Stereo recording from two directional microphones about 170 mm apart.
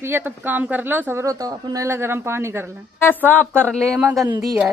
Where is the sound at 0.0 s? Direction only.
15° right (ahead or behind).